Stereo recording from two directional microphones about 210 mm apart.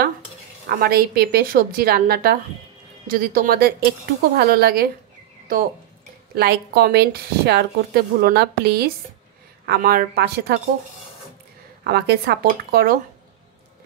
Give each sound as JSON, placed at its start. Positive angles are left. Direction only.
{"t": 0.7, "sound": "a woman's voice", "side_deg": -45}
{"t": 6.3, "sound": "a woman's voice", "side_deg": -50}
{"t": 11.8, "sound": "a woman's voice", "side_deg": -50}